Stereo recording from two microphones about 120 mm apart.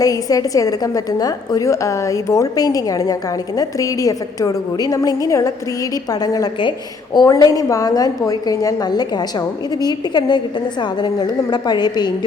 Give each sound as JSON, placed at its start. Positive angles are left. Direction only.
{"t": 0.0, "sound": "a woman's voice", "side_deg": 30}